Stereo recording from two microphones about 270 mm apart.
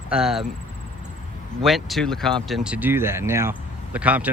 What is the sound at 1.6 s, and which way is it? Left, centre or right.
Speech, centre.